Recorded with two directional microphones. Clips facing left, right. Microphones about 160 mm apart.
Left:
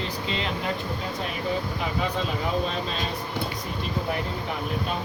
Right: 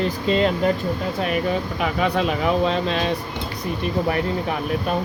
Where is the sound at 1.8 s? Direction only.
80° right.